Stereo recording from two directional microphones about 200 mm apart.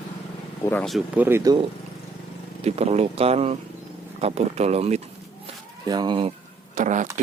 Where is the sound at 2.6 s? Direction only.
30° right (ahead or behind).